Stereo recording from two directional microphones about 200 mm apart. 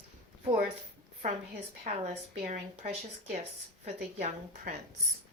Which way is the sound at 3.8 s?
40° right (ahead or behind).